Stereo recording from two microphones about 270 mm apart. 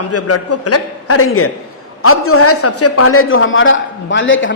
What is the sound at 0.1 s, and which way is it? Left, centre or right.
A man's voice, left.